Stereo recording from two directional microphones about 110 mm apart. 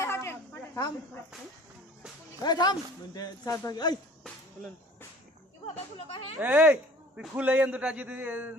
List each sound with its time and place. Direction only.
0.0 s a sound: 25° left (ahead or behind)
2.4 s speech: 40° left (ahead or behind)
5.7 s speech: 65° left (ahead or behind)
6.4 s a man's voice: 15° right (ahead or behind)